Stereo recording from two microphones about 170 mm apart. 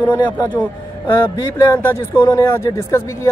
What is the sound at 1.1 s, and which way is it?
Speech, 15° left (ahead or behind).